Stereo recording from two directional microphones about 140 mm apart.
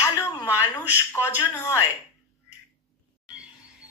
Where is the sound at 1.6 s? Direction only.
20° left (ahead or behind).